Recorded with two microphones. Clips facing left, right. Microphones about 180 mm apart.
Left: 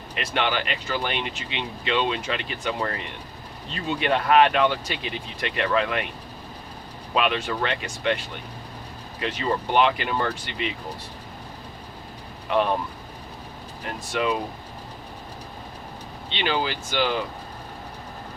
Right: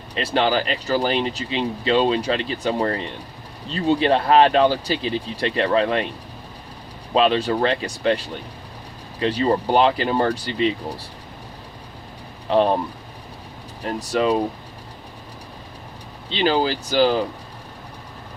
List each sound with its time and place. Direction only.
0.1 s speech: 35° right (ahead or behind)
7.1 s speech: 30° right (ahead or behind)
9.2 s speech: 35° right (ahead or behind)
12.5 s speech: 35° right (ahead or behind)
13.8 s speech: 35° right (ahead or behind)
16.3 s speech: 35° right (ahead or behind)